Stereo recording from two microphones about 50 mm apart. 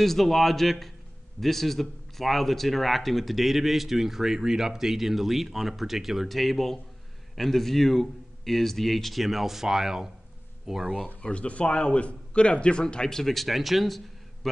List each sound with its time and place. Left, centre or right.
0.0 s speech: centre
11.2 s speech: left; by 14.5 s centre